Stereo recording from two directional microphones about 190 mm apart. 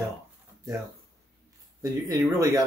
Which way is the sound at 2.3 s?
20° right (ahead or behind).